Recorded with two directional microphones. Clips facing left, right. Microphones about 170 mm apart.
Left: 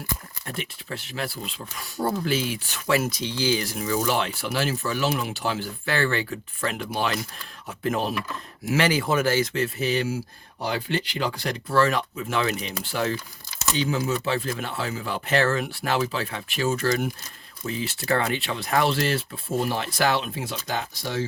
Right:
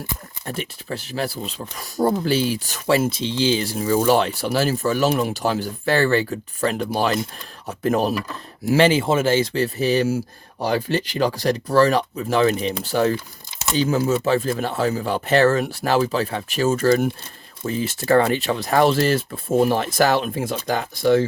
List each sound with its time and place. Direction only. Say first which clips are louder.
0.4 s speech: right 5 dB; 40° right (ahead or behind)
8.6 s speech: right 6 dB; 30° right (ahead or behind); by 21.2 s 55° right (ahead or behind)